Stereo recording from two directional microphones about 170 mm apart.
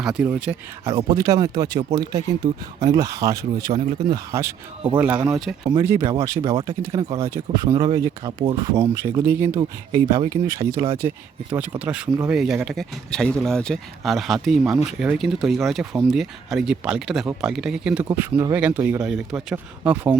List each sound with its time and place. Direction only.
0.0 s speech: 5° right (ahead or behind)
0.9 s speech: 25° right (ahead or behind)
12.3 s speech: centre (ahead or behind)
18.1 s speech: 15° right (ahead or behind)
19.0 s speech: 5° right (ahead or behind)